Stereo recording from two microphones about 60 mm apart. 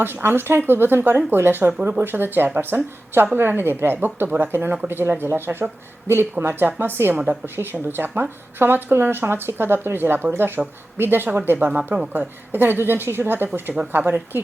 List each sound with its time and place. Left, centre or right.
0.0 s a woman's voice: right